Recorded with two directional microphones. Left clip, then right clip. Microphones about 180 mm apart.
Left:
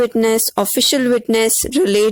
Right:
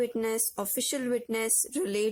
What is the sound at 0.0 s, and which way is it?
Speech, 40° left (ahead or behind).